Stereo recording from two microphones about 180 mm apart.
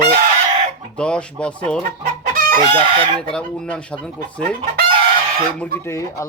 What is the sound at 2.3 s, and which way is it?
Chicken, 50° right (ahead or behind).